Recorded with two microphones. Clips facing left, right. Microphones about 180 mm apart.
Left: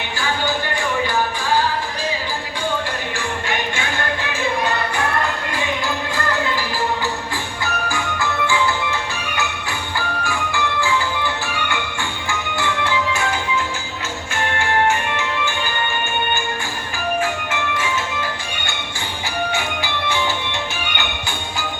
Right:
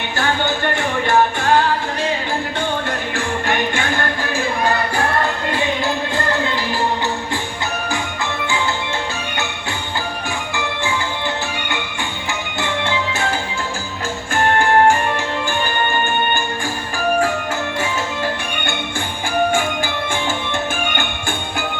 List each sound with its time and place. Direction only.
0.2 s music: 65° right (ahead or behind)
3.2 s music: 50° right (ahead or behind)
7.9 s music: 25° right (ahead or behind)
10.2 s music: 20° right (ahead or behind)
12.3 s music: 25° right (ahead or behind)
14.3 s music: 45° right (ahead or behind)
17.2 s music: 40° right (ahead or behind)
19.5 s music: 50° right (ahead or behind)